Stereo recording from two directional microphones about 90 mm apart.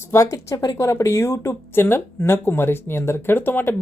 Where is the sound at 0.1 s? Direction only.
35° left (ahead or behind).